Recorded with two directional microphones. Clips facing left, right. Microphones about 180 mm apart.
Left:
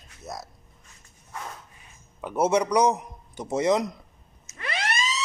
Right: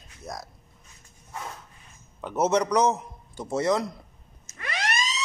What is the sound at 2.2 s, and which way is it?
Speech, 10° left (ahead or behind).